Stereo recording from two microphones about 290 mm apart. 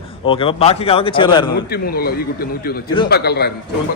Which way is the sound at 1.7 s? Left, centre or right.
Left.